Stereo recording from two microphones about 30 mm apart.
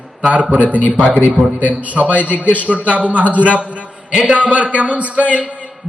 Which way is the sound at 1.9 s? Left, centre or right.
Right.